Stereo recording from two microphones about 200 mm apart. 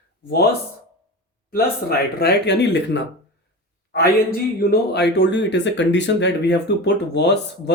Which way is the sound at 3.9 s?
50° left (ahead or behind).